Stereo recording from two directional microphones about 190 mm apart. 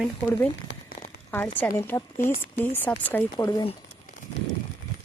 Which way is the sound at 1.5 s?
10° left (ahead or behind).